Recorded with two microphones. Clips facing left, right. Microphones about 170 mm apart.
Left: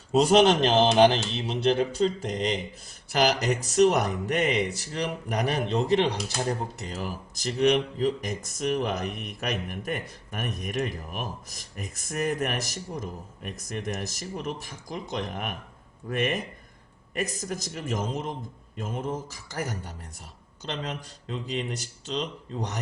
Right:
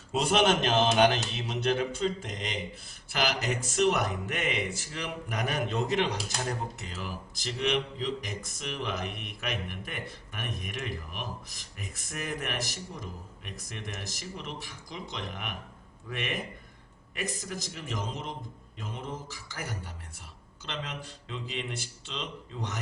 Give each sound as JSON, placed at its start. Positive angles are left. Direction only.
{"t": 0.1, "sound": "speech", "side_deg": 40}